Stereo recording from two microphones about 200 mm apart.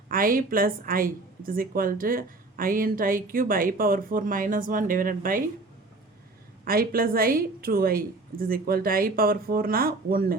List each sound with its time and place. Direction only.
0.1 s a woman's voice: 45° right (ahead or behind)
6.7 s a woman's voice: 45° right (ahead or behind)